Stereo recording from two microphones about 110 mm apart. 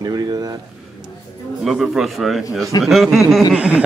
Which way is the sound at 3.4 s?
10° right (ahead or behind).